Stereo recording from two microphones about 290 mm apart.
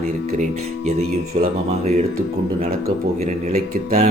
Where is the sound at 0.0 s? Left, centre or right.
Right.